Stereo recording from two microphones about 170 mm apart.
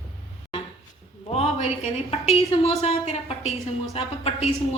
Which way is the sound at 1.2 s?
35° left (ahead or behind).